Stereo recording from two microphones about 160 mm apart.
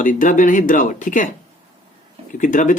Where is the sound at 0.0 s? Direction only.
55° left (ahead or behind).